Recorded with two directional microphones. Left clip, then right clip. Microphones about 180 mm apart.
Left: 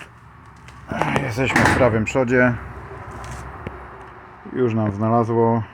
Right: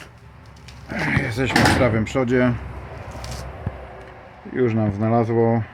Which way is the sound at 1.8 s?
10° left (ahead or behind).